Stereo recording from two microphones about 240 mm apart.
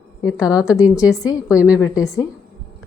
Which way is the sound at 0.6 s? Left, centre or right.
Centre.